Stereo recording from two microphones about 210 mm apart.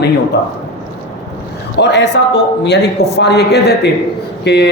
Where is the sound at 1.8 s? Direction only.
55° left (ahead or behind).